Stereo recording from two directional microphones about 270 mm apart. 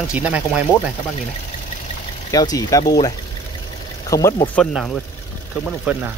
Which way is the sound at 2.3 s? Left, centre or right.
Centre.